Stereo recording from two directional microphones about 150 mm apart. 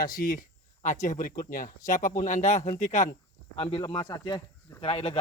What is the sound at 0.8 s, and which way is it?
Speech, 50° left (ahead or behind).